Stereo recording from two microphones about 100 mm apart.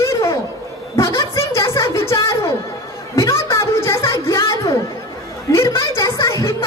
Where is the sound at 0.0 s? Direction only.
30° left (ahead or behind).